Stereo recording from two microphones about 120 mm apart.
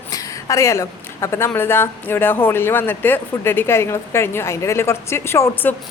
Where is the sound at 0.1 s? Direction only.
30° left (ahead or behind).